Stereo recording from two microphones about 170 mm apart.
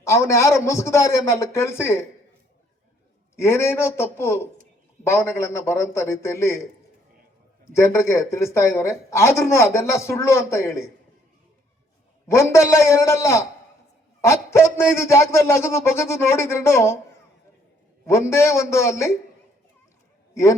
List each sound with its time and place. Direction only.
0.0 s speech: 15° left (ahead or behind)
3.3 s speech: 15° left (ahead or behind)
7.7 s speech: 15° left (ahead or behind)
12.3 s speech: 15° left (ahead or behind)
18.0 s speech: 15° left (ahead or behind)
20.3 s a man's voice: 15° left (ahead or behind)